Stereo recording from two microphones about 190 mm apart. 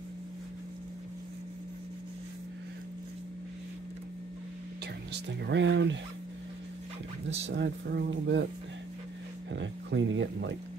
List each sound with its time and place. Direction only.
5.1 s speech: 65° right (ahead or behind)
7.3 s speech: 65° right (ahead or behind)
9.5 s speech: 70° right (ahead or behind)